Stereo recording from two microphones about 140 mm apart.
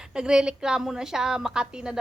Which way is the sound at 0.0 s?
5° right (ahead or behind).